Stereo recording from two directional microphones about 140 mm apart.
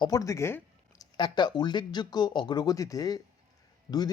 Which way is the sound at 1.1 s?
35° left (ahead or behind).